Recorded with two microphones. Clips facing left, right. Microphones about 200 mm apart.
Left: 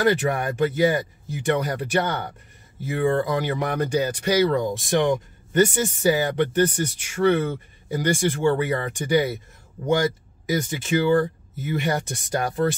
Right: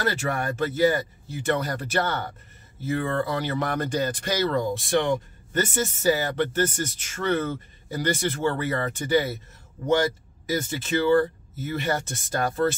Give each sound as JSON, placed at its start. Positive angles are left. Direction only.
{"t": 0.0, "sound": "speech", "side_deg": 15}
{"t": 10.4, "sound": "speech", "side_deg": 15}